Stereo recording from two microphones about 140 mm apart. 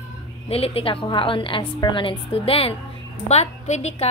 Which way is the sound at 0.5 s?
45° left (ahead or behind).